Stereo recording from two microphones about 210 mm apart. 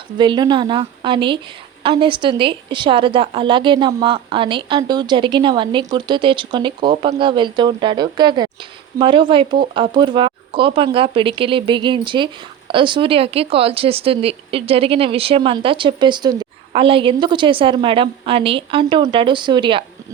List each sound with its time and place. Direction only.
0.2 s speech: 20° right (ahead or behind)